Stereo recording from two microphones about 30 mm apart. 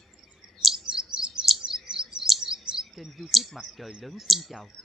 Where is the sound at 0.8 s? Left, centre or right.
Right.